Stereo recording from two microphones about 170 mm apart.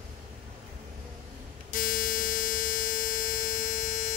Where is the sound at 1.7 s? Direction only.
50° left (ahead or behind).